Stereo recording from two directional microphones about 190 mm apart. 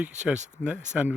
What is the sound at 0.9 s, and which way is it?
Speech, 5° right (ahead or behind).